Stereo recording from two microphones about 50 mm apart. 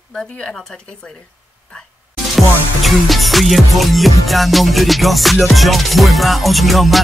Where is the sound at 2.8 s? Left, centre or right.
Centre.